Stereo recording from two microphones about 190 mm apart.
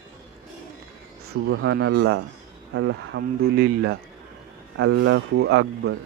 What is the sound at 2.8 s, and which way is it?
Speech, 90° right.